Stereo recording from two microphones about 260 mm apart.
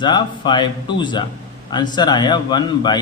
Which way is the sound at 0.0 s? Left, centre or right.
Centre.